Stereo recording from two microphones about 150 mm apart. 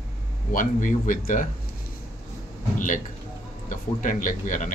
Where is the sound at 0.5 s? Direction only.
60° left (ahead or behind).